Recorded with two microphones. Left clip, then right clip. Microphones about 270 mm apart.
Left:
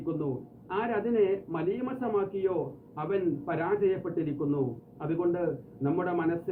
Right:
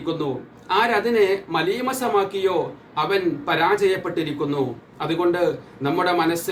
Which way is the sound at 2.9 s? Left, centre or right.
Centre.